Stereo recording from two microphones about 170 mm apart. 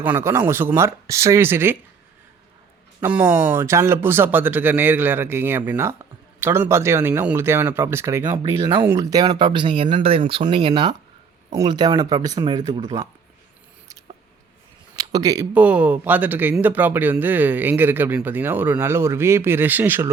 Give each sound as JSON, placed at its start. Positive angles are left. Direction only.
{"t": 0.0, "sound": "speech", "side_deg": -15}
{"t": 3.0, "sound": "speech", "side_deg": -10}
{"t": 14.9, "sound": "a sound", "side_deg": -20}
{"t": 15.5, "sound": "speech", "side_deg": -10}